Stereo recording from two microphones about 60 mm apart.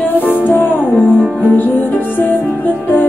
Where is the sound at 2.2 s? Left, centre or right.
Left.